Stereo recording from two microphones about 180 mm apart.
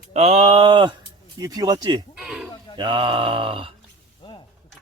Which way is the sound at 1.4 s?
20° right (ahead or behind).